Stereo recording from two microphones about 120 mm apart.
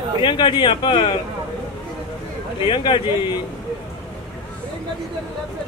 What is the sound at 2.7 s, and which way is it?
Speech, 45° left (ahead or behind).